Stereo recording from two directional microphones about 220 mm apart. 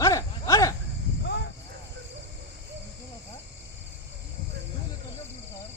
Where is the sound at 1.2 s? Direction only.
50° left (ahead or behind).